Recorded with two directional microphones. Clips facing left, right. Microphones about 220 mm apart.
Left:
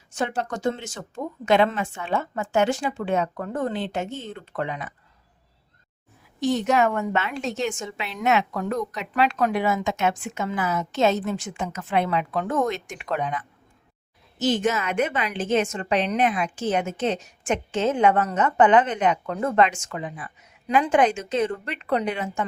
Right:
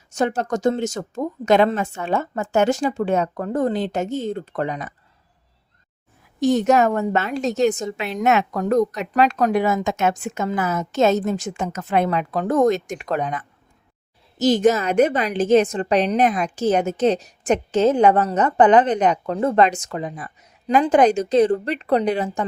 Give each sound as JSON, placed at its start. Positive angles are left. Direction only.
{"t": 0.1, "sound": "a woman's voice", "side_deg": -45}
{"t": 6.4, "sound": "a woman's voice", "side_deg": -45}